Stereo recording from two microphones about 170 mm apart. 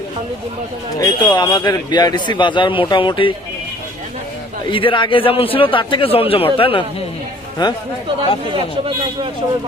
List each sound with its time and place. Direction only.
0.9 s a man's voice: 25° left (ahead or behind)
4.6 s a man's voice: 30° left (ahead or behind)